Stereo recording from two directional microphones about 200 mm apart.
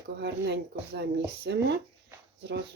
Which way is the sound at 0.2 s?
60° right (ahead or behind).